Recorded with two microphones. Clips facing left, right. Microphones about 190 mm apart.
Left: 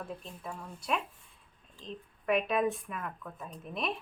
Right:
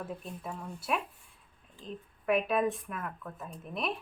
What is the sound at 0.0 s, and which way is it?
A woman's voice, 5° right (ahead or behind).